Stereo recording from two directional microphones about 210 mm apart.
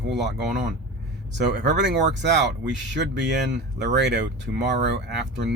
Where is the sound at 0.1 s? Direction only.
55° right (ahead or behind).